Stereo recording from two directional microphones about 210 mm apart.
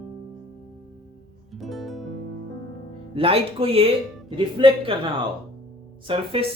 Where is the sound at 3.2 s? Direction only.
25° right (ahead or behind).